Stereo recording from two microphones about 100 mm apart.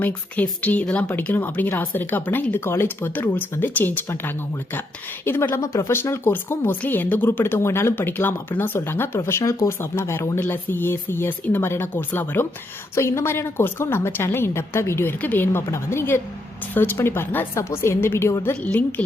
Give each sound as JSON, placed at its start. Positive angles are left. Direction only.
{"t": 0.0, "sound": "speech", "side_deg": 15}
{"t": 5.2, "sound": "a woman's voice", "side_deg": 20}
{"t": 18.6, "sound": "speech", "side_deg": 15}